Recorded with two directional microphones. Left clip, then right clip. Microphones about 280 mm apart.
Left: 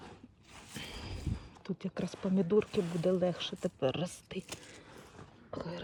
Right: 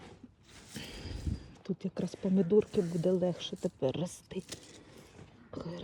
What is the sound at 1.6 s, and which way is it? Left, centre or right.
Speech, centre.